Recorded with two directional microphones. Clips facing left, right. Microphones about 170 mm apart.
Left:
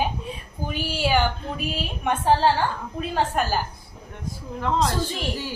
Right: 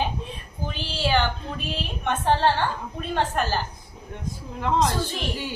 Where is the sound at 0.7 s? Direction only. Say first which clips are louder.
Left 2 dB; 10° left (ahead or behind).